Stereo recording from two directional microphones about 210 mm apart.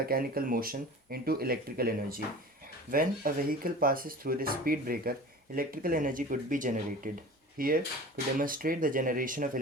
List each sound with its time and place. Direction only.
0.0 s speech: 45° right (ahead or behind)